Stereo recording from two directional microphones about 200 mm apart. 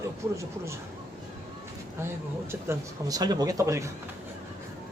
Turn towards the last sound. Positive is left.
turn(degrees=-15)  # may be behind; listen again after turning